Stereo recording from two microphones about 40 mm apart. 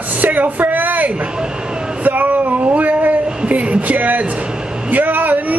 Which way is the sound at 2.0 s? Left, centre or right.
Right.